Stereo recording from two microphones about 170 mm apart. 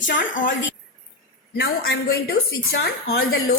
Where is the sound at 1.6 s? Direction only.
70° left (ahead or behind).